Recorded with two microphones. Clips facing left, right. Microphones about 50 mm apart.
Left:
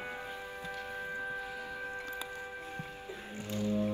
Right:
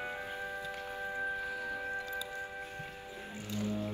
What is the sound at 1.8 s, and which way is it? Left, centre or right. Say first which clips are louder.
Music: right 2 dB; left.